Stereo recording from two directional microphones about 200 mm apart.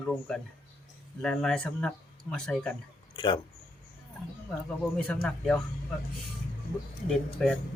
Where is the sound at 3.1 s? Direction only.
25° left (ahead or behind).